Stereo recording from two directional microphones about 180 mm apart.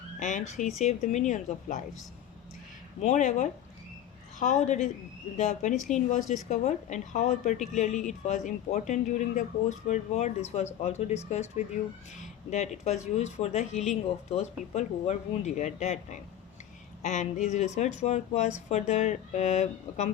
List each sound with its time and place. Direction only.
0.2 s a woman's voice: 45° left (ahead or behind)
3.0 s a woman's voice: 45° left (ahead or behind)